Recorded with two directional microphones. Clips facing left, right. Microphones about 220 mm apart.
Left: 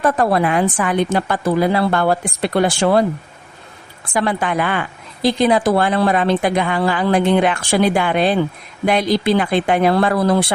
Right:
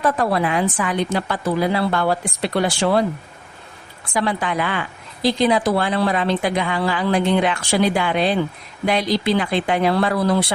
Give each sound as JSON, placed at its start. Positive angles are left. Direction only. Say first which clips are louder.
{"t": 0.0, "sound": "a woman's voice", "louder": "left 3 dB", "side_deg": 50}
{"t": 4.1, "sound": "a woman's voice", "louder": "left 3 dB", "side_deg": 50}